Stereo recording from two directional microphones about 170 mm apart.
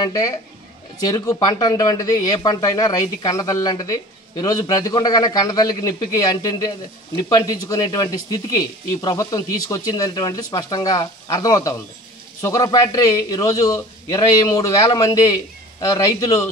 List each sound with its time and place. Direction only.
0.0 s speech: 20° left (ahead or behind)